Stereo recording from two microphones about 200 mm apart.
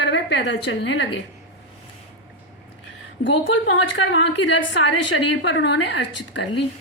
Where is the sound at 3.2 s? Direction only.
65° left (ahead or behind).